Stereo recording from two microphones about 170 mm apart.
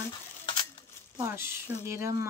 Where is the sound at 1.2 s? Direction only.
15° right (ahead or behind).